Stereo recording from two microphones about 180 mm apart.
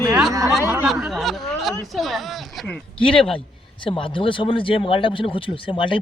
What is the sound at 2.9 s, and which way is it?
Speech, 30° left (ahead or behind).